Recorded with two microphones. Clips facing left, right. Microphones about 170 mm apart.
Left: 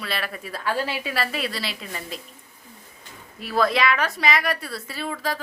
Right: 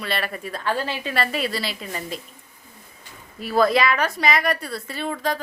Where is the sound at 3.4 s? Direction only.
Centre (ahead or behind).